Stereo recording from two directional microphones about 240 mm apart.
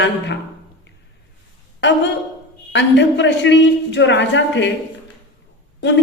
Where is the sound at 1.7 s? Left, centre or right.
Left.